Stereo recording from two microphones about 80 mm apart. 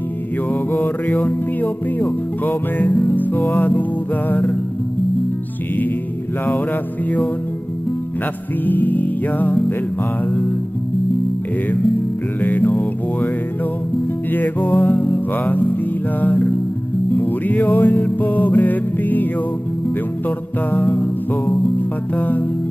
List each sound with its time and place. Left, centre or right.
0.5 s music: left
8.6 s music: left
12.4 s music: left
14.3 s music: left
20.2 s music: left